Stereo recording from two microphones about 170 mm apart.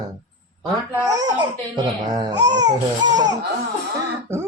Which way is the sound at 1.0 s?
20° right (ahead or behind).